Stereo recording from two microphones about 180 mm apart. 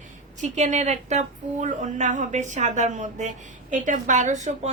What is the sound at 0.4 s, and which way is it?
A woman's voice, 40° right (ahead or behind).